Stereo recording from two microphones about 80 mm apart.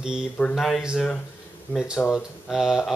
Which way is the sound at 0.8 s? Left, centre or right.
Centre.